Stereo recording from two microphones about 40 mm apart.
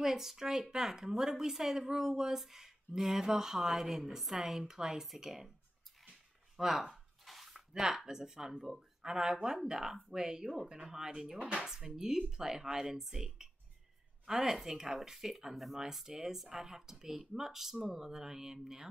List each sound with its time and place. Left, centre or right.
0.0 s speech: centre
6.5 s speech: centre